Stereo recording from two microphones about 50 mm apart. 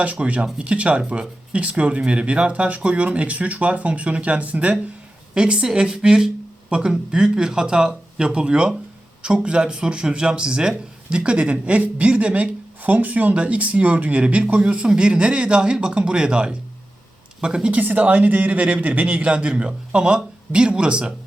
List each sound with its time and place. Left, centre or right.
0.0 s speech: right
5.3 s speech: centre